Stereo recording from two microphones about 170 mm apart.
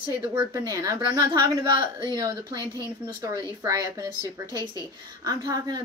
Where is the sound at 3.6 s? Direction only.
20° right (ahead or behind).